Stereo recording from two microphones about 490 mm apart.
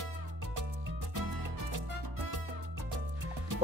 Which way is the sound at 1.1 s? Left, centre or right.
Right.